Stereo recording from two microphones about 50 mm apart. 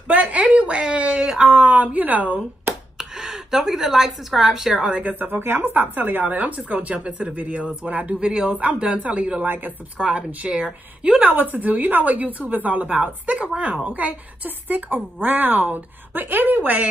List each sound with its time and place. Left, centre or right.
0.1 s a woman's voice: right
3.0 s a woman's voice: centre
4.8 s a woman's voice: right
5.4 s speech: right
5.7 s a woman's voice: right
8.3 s a woman's voice: centre
9.4 s a woman's voice: right
9.9 s a woman's voice: right